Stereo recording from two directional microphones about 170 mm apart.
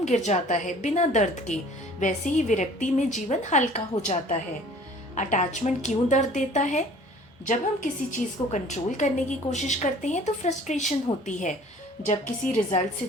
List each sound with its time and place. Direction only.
0.0 s a woman's voice: 45° left (ahead or behind)
12.7 s a woman's voice: 45° left (ahead or behind)